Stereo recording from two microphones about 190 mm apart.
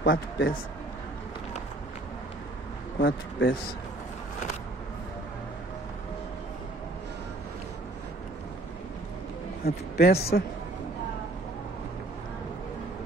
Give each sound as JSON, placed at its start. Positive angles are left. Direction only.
{"t": 0.0, "sound": "a man's voice", "side_deg": 50}
{"t": 3.0, "sound": "a man's voice", "side_deg": 70}
{"t": 9.7, "sound": "a man's voice", "side_deg": 55}